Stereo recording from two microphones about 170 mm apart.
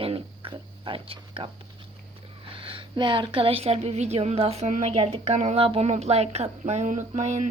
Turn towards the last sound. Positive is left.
turn(degrees=-45)  # may be behind; listen again after turning